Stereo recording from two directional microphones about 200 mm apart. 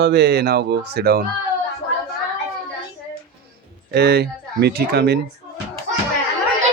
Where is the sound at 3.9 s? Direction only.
55° right (ahead or behind).